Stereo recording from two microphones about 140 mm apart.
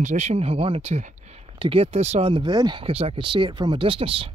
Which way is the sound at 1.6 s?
40° right (ahead or behind).